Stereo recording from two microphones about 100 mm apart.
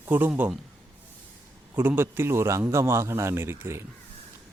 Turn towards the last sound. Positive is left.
turn(degrees=-25)  # may be behind; listen again after turning